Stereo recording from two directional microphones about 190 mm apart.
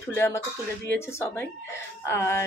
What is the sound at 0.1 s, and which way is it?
Speech, 15° left (ahead or behind).